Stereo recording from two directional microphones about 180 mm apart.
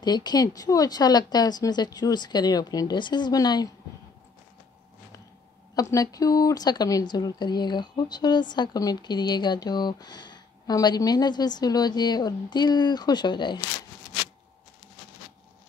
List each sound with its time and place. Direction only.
0.0 s speech: 25° left (ahead or behind)
5.8 s speech: 20° left (ahead or behind)